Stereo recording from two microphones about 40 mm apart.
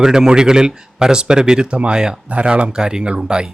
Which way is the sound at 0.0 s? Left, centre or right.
Centre.